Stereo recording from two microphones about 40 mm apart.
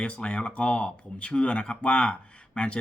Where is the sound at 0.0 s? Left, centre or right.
Left.